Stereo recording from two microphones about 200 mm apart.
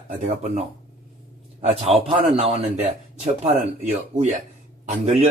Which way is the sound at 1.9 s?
30° right (ahead or behind).